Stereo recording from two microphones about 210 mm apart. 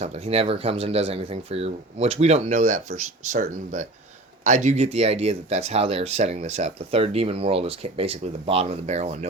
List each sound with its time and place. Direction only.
0.0 s speech: 30° right (ahead or behind)